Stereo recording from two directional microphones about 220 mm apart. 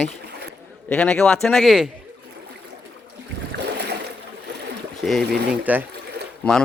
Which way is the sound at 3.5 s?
50° right (ahead or behind).